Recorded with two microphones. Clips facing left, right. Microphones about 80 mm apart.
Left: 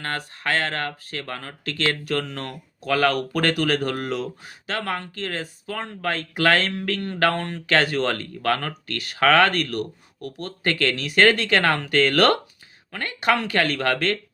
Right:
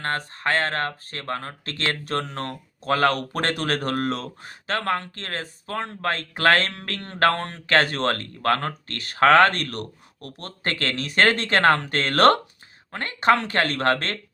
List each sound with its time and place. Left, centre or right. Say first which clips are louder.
0.0 s speech: right 2 dB; right